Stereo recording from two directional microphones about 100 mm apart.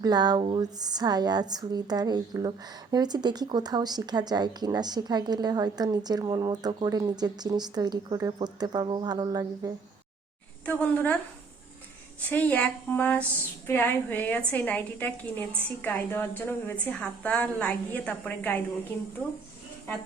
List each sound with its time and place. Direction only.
0.0 s a woman's voice: 45° right (ahead or behind)
10.7 s a woman's voice: 15° left (ahead or behind)
12.3 s a woman's voice: 15° left (ahead or behind)